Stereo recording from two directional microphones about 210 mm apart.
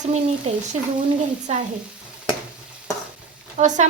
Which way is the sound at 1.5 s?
30° right (ahead or behind).